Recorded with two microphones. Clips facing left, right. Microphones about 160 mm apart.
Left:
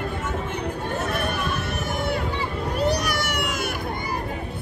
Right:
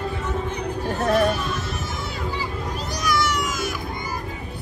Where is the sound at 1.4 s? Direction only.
60° left (ahead or behind).